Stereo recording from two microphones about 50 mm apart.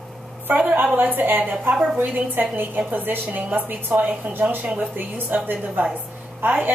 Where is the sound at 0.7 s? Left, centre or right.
Right.